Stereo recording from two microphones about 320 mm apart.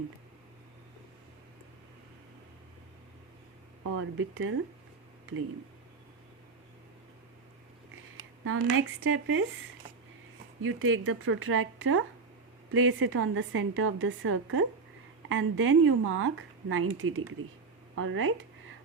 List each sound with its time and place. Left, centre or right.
4.2 s a woman's voice: right
8.4 s a woman's voice: right
10.6 s a woman's voice: right